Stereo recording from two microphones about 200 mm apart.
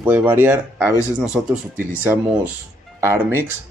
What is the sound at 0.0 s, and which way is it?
Speech, 10° right (ahead or behind).